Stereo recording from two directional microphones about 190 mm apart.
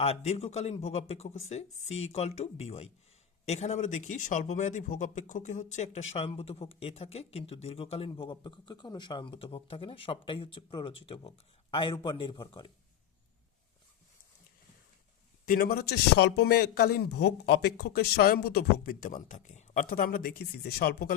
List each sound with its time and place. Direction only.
0.0 s speech: 35° left (ahead or behind)
15.4 s a man's voice: 50° left (ahead or behind)